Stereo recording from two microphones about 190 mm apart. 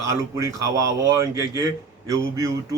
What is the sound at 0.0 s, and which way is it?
Speech, 15° right (ahead or behind).